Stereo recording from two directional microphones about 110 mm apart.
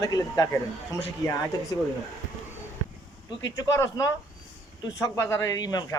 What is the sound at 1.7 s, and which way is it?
Speech, 35° left (ahead or behind).